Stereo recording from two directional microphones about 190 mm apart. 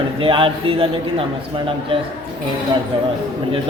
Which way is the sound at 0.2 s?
30° right (ahead or behind).